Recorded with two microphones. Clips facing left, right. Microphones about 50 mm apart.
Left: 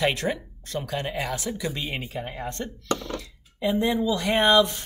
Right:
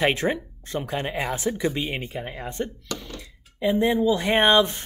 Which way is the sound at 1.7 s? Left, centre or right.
Centre.